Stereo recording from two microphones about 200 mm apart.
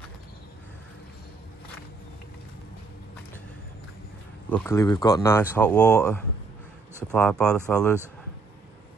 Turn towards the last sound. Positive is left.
turn(degrees=5)  # may be behind; listen again after turning